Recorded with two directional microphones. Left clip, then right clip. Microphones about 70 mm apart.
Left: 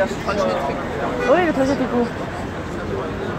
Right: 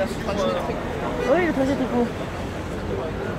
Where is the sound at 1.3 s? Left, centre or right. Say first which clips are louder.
Left 4 dB; right.